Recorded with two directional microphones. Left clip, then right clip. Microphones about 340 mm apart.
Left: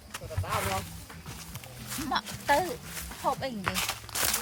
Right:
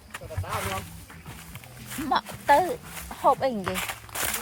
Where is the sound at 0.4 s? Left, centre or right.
Centre.